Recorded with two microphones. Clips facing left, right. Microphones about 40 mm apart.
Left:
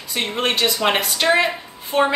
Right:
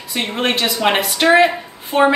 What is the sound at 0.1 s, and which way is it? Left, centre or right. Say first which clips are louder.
A woman's voice: right 2 dB; centre.